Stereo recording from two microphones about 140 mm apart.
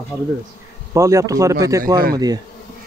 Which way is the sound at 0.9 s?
20° right (ahead or behind).